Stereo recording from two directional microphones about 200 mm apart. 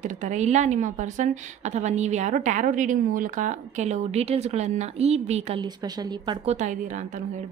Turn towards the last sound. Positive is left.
turn(degrees=-40)  # may be behind; listen again after turning